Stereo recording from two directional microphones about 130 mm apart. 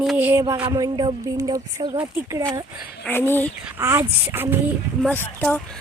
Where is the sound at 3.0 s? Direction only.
15° left (ahead or behind).